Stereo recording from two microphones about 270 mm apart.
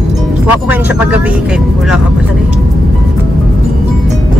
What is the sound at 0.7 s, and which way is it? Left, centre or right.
Speech, centre.